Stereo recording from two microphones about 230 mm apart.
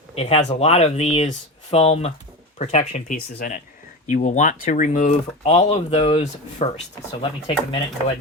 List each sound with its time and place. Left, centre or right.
0.2 s speech: left